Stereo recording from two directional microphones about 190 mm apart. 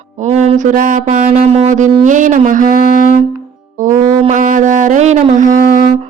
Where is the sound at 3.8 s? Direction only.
40° right (ahead or behind).